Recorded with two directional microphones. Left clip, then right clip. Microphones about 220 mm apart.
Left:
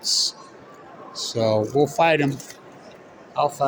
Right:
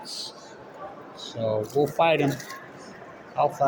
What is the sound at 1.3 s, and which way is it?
Speech, 50° left (ahead or behind).